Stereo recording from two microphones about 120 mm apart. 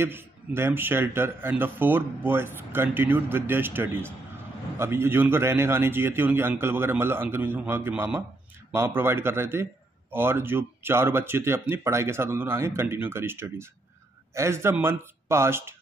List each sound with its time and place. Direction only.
0.0 s a man's voice: 20° right (ahead or behind)